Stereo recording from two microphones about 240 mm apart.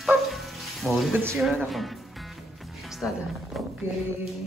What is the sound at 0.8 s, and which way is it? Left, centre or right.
Speech, centre.